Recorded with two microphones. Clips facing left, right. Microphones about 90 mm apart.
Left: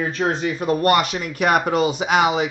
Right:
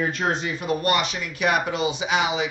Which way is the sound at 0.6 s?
45° left (ahead or behind).